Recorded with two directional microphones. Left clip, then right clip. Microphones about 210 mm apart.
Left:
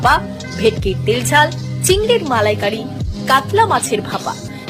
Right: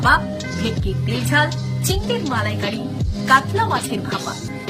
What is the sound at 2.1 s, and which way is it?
Speech, 20° left (ahead or behind).